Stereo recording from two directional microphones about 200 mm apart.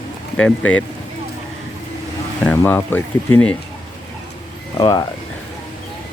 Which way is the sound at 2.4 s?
10° left (ahead or behind).